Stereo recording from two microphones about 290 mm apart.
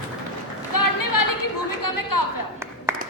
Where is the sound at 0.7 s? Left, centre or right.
Left.